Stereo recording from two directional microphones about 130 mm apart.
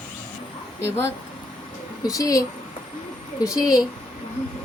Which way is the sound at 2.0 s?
25° left (ahead or behind).